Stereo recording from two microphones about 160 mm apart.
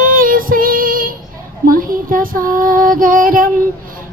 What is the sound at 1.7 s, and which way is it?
Female singing, 60° right (ahead or behind).